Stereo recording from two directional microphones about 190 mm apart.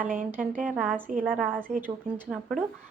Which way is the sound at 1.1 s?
45° right (ahead or behind).